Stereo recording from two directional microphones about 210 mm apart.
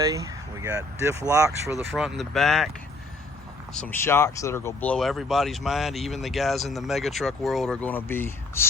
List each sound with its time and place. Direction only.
0.0 s speech: 15° right (ahead or behind)
1.9 s speech: centre (ahead or behind)
3.8 s speech: 10° left (ahead or behind)